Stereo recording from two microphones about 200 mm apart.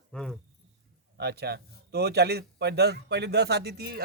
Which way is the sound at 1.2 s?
55° right (ahead or behind).